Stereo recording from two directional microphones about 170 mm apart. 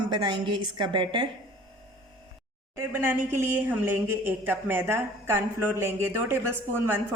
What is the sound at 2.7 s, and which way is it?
A man's voice, 15° right (ahead or behind).